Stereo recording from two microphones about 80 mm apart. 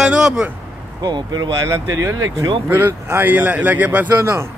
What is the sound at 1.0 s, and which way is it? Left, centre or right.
Speech, right.